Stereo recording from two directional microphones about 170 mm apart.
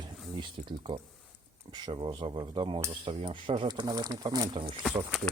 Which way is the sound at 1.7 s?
25° right (ahead or behind).